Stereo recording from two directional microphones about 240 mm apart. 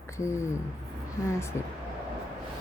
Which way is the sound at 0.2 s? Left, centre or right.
Centre.